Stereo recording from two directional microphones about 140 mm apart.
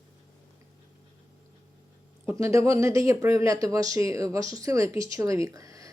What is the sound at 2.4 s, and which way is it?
Speech, 20° right (ahead or behind).